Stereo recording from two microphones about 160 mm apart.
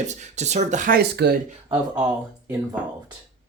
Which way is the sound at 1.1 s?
90° right.